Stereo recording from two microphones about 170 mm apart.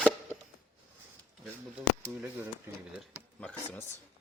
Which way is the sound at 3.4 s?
10° left (ahead or behind).